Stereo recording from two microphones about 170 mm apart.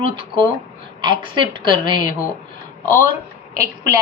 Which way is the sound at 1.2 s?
30° right (ahead or behind).